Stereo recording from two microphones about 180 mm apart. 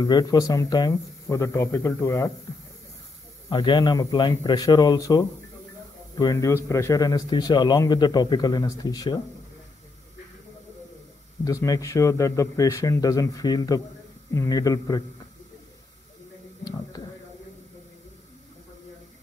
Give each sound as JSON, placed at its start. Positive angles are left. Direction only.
{"t": 0.0, "sound": "speech", "side_deg": 20}
{"t": 3.4, "sound": "a man's voice", "side_deg": 25}
{"t": 11.4, "sound": "a man's voice", "side_deg": 20}